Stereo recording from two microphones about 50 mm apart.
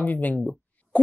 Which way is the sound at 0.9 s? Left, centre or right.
Left.